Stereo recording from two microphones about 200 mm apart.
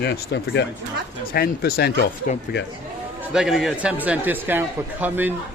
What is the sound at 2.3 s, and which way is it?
Speech, 40° left (ahead or behind).